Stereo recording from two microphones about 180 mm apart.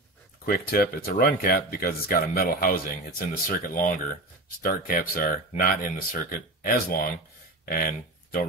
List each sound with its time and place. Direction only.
0.5 s speech: 55° left (ahead or behind)